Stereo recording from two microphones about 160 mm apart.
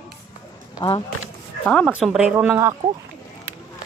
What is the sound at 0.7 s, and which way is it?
Speech, 25° left (ahead or behind).